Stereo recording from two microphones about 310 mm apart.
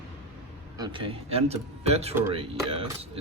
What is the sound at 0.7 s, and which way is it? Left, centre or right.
Speech, centre.